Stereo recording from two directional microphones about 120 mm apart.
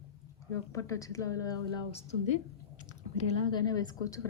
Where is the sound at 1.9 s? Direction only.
55° left (ahead or behind).